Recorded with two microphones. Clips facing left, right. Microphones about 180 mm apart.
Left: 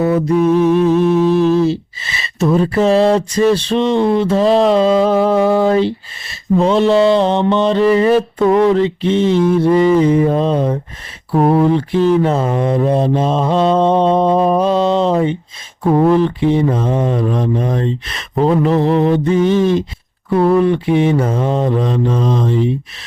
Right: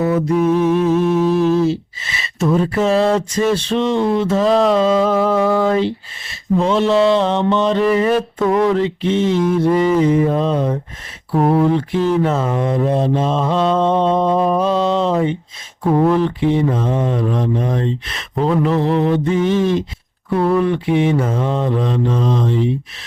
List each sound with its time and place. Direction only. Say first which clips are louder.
0.3 s mantra: left 3 dB; 5° right (ahead or behind)
1.0 s humming: left 3 dB; 5° right (ahead or behind)
1.6 s a sound: left 2 dB; 30° left (ahead or behind)
3.5 s mantra: left 3 dB; 30° left (ahead or behind)
4.7 s a sound: left 2 dB; 30° left (ahead or behind)
6.6 s mantra: left 3 dB; 35° left (ahead or behind)
6.9 s mantra: left 1 dB; centre (ahead or behind)
7.2 s mantra: left 2 dB; 35° left (ahead or behind)
11.3 s a sound: left 2 dB; 30° left (ahead or behind)
11.9 s mantra: left 3 dB; 30° left (ahead or behind)